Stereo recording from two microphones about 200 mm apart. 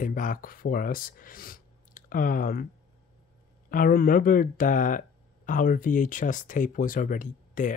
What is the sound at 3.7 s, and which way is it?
Speech, 45° left (ahead or behind).